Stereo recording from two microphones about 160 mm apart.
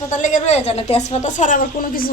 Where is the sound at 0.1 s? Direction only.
50° left (ahead or behind).